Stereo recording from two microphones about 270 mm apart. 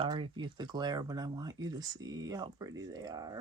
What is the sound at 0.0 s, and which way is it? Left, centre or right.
Speech, centre.